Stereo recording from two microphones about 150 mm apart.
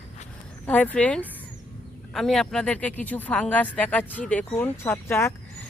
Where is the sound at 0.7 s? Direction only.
10° left (ahead or behind).